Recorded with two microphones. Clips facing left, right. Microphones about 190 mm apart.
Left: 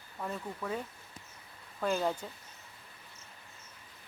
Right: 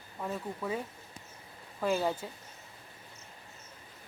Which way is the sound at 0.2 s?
5° right (ahead or behind).